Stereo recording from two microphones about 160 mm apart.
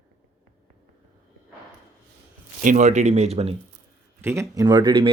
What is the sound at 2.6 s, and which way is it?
Speech, 50° right (ahead or behind).